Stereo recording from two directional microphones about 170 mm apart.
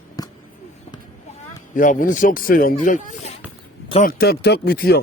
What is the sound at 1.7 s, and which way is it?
Speech, 50° left (ahead or behind).